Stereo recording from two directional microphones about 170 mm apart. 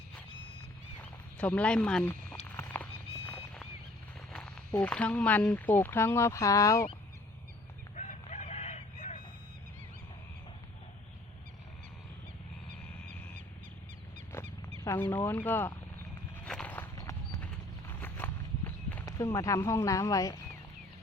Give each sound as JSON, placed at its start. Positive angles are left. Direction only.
{"t": 1.4, "sound": "speech", "side_deg": 10}
{"t": 2.0, "sound": "a sound", "side_deg": 15}
{"t": 4.3, "sound": "speech", "side_deg": 5}
{"t": 7.9, "sound": "fowl", "side_deg": 40}
{"t": 14.3, "sound": "wild animals", "side_deg": 15}
{"t": 14.8, "sound": "speech", "side_deg": 10}
{"t": 16.4, "sound": "horse", "side_deg": 5}
{"t": 17.4, "sound": "walk", "side_deg": 10}
{"t": 19.0, "sound": "speech", "side_deg": 20}